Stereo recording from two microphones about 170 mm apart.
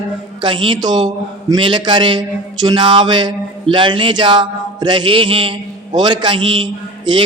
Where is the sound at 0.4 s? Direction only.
30° right (ahead or behind).